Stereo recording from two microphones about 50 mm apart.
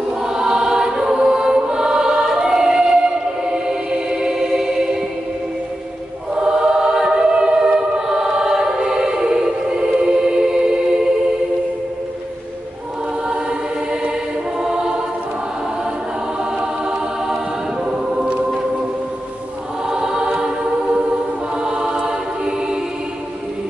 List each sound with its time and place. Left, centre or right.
0.3 s choir: centre
3.4 s music: centre
6.3 s choir: centre
14.6 s choir: centre
19.9 s choir: centre
21.6 s choir: centre